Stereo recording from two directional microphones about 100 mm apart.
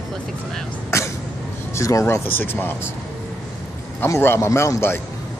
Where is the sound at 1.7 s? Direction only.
30° left (ahead or behind).